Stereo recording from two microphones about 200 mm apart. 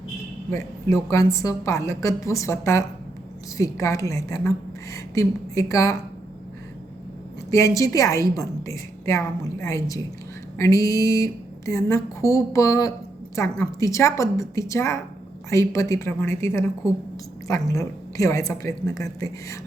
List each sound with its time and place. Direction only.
0.5 s a woman's voice: 15° left (ahead or behind)
7.5 s a woman's voice: 15° left (ahead or behind)